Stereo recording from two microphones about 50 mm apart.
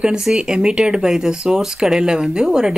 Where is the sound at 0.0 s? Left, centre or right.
Centre.